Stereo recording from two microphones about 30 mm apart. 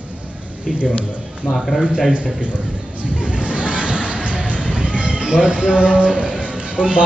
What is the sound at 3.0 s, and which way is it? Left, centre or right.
Speech, right.